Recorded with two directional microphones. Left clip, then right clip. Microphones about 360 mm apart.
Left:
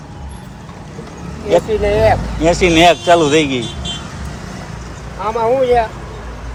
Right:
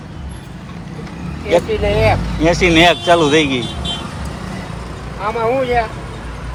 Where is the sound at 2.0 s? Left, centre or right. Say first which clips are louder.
Left 2 dB; centre.